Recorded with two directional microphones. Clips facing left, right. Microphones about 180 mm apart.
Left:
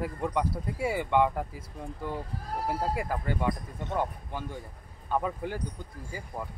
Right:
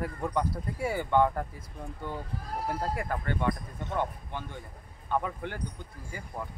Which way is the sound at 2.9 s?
10° left (ahead or behind).